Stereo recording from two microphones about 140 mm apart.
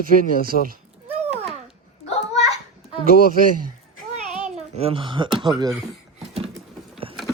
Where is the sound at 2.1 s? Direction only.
50° left (ahead or behind).